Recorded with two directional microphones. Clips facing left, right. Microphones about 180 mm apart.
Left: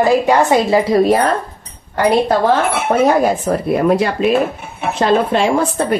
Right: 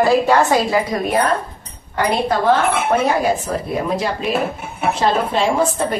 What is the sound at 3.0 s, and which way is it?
Speech, 60° left (ahead or behind).